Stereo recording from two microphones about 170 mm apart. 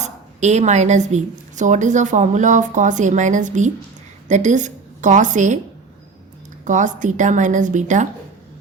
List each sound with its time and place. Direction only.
0.0 s a woman's voice: 40° right (ahead or behind)
6.7 s a woman's voice: 45° right (ahead or behind)